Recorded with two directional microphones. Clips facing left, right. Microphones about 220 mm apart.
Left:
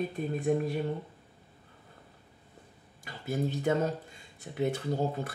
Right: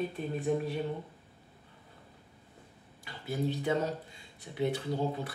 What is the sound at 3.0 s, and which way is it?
Speech, 45° left (ahead or behind).